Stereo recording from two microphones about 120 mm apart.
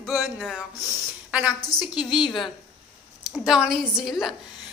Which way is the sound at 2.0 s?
5° right (ahead or behind).